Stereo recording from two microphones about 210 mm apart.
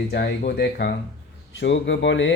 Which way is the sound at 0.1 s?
50° left (ahead or behind).